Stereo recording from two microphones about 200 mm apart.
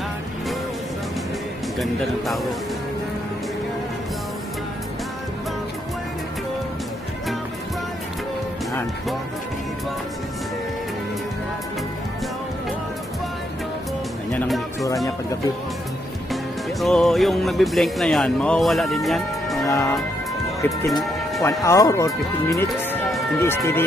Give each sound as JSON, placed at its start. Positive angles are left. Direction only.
{"t": 1.8, "sound": "speech", "side_deg": 0}
{"t": 14.3, "sound": "music", "side_deg": 0}
{"t": 16.8, "sound": "speech", "side_deg": 0}
{"t": 19.6, "sound": "music", "side_deg": 15}
{"t": 20.6, "sound": "speech", "side_deg": 15}